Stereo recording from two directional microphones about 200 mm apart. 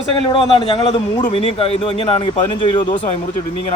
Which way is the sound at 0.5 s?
30° left (ahead or behind).